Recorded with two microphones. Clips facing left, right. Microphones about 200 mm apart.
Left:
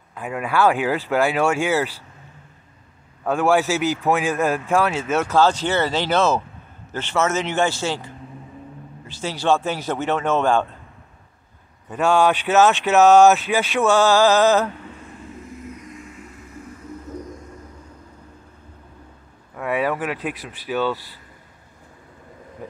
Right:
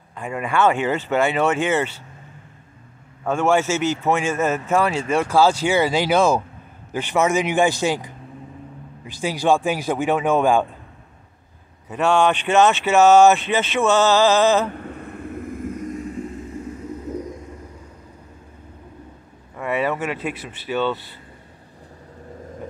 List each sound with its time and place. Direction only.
0.1 s a man's voice: centre (ahead or behind)
3.3 s a man's voice: centre (ahead or behind)
5.3 s a man's voice: 10° right (ahead or behind)
11.9 s a man's voice: centre (ahead or behind)
14.8 s vehicle: 60° right (ahead or behind); by 16.2 s 40° right (ahead or behind)
19.5 s speech: 5° left (ahead or behind)